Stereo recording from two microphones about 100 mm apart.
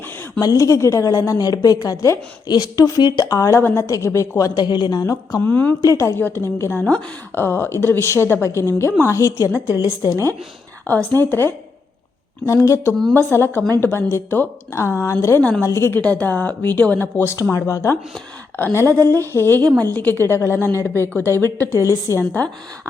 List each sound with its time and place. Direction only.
0.3 s a woman's voice: 35° left (ahead or behind)
5.4 s a woman's voice: 20° left (ahead or behind)
5.8 s a woman's voice: 30° left (ahead or behind)
9.6 s a woman's voice: 25° right (ahead or behind)
10.0 s a woman's voice: 35° left (ahead or behind)
11.1 s a woman's voice: 20° left (ahead or behind)
12.5 s a woman's voice: 30° left (ahead or behind)
15.4 s speech: 15° left (ahead or behind)
15.6 s a woman's voice: 25° left (ahead or behind)
16.0 s a woman's voice: 15° left (ahead or behind)
18.9 s a woman's voice: 35° right (ahead or behind)
19.1 s a woman's voice: 25° left (ahead or behind)